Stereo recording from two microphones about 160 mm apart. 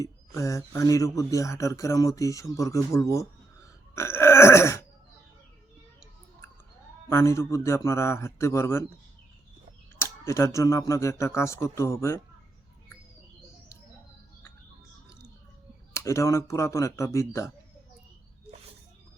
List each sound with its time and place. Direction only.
0.0 s speech: 20° left (ahead or behind)
3.9 s burping: 15° left (ahead or behind)
7.1 s speech: 15° left (ahead or behind)
10.0 s speech: 20° left (ahead or behind)
15.9 s speech: 20° left (ahead or behind)